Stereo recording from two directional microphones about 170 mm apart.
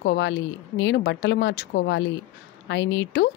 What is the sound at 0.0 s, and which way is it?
Speech, 90° left.